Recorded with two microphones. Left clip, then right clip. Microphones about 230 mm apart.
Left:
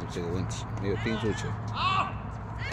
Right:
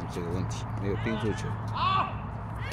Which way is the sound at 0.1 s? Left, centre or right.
Centre.